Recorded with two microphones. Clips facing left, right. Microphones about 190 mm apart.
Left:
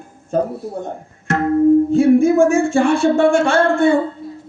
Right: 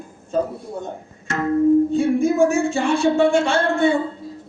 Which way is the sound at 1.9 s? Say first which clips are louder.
Left 6 dB; 55° left (ahead or behind).